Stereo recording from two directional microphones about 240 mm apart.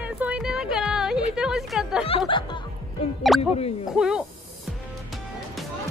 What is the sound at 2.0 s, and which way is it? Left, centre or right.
Music, left.